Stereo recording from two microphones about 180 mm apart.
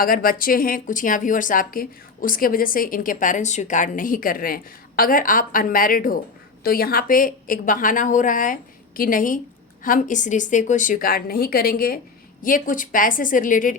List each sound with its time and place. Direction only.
0.0 s speech: 50° left (ahead or behind)